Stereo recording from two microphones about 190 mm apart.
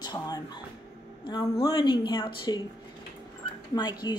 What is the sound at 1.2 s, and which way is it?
A woman's voice, 25° left (ahead or behind).